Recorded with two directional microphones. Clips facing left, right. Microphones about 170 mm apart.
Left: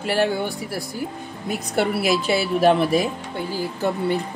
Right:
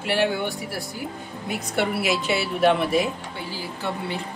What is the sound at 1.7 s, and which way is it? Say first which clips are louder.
Speech: left 3 dB; 40° left (ahead or behind).